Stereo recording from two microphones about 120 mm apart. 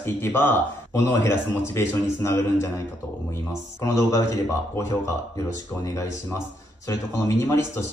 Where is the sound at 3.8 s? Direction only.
25° left (ahead or behind).